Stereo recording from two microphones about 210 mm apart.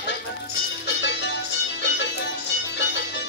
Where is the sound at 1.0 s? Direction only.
55° left (ahead or behind).